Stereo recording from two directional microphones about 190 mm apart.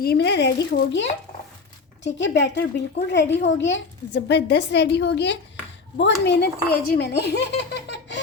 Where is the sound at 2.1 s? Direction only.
65° left (ahead or behind).